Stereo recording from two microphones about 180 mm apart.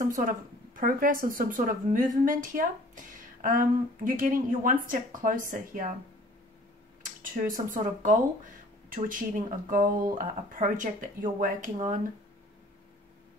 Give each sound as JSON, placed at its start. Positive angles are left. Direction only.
{"t": 0.7, "sound": "speech", "side_deg": -50}
{"t": 7.0, "sound": "speech", "side_deg": -50}